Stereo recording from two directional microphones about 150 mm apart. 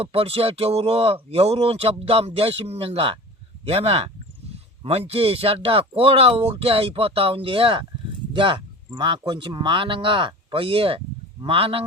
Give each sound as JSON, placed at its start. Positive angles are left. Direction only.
{"t": 0.0, "sound": "speech", "side_deg": -40}